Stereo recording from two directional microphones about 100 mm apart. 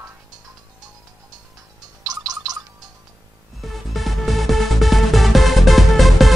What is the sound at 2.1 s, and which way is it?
Gargling, 40° right (ahead or behind).